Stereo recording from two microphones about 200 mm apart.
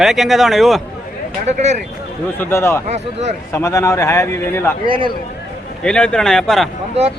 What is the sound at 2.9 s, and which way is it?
Speech, 35° right (ahead or behind).